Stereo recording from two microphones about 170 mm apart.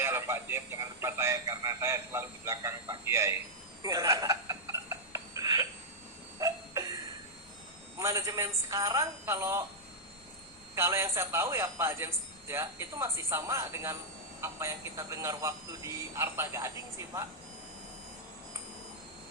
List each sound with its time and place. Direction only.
0.0 s a man's voice: 15° right (ahead or behind)
3.8 s chuckle: 20° right (ahead or behind)
6.4 s a sound: 20° right (ahead or behind)
7.9 s a man's voice: 15° right (ahead or behind)
10.8 s a man's voice: 15° right (ahead or behind)